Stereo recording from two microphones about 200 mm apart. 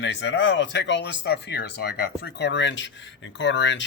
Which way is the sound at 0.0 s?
60° left (ahead or behind).